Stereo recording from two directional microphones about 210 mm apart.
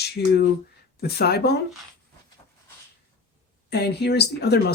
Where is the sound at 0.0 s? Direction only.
50° left (ahead or behind).